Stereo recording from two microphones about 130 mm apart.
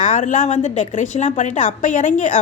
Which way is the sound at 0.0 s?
70° left (ahead or behind).